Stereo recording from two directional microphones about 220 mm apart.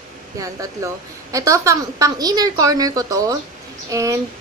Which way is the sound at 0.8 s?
15° right (ahead or behind).